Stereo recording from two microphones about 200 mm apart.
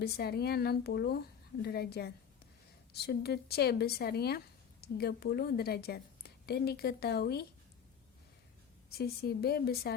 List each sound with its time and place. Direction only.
0.0 s speech: 50° left (ahead or behind)
8.9 s speech: 50° left (ahead or behind)